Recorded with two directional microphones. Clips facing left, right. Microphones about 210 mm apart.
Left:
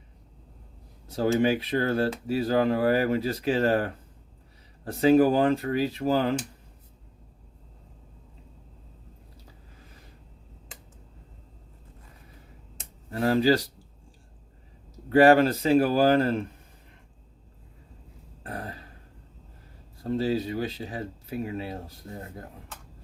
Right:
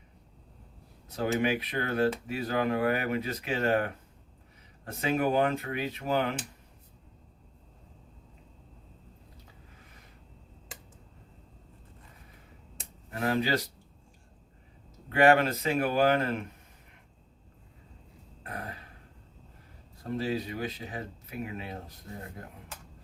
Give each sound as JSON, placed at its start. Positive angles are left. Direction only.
{"t": 1.0, "sound": "speech", "side_deg": 30}
{"t": 13.1, "sound": "speech", "side_deg": 30}
{"t": 15.1, "sound": "speech", "side_deg": 35}
{"t": 18.4, "sound": "grunt", "side_deg": 30}
{"t": 20.1, "sound": "speech", "side_deg": 30}